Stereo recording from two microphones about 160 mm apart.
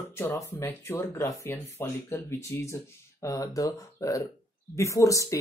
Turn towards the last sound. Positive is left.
turn(degrees=20)  # may be behind; listen again after turning